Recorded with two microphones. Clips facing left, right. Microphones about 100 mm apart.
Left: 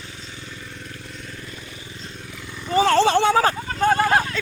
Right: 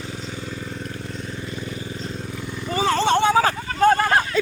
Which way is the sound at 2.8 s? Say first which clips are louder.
Left 1 dB; 80° left.